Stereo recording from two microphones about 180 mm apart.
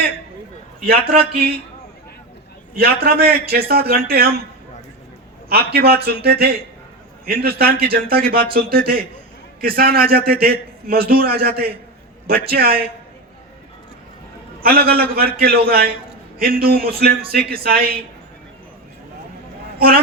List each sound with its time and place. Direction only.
0.9 s a man's voice: 60° right (ahead or behind)
2.7 s a man's voice: 60° right (ahead or behind)
5.5 s a man's voice: 60° right (ahead or behind)
14.6 s a man's voice: 60° right (ahead or behind)